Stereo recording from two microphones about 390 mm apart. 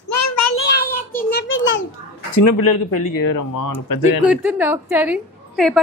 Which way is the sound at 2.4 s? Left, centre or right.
Left.